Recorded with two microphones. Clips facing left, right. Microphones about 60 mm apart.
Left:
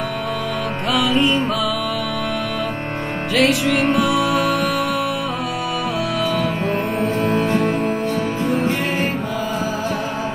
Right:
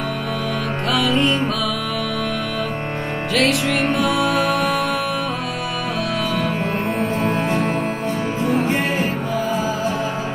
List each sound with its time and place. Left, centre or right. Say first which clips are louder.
0.9 s music: left 1 dB; centre
3.3 s music: left 2 dB; centre
7.4 s music: left 2 dB; centre